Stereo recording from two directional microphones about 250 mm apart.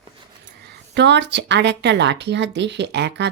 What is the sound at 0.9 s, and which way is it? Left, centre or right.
A woman's voice, right.